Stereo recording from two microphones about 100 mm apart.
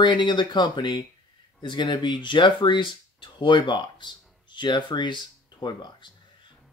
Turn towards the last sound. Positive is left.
turn(degrees=50)  # may be behind; listen again after turning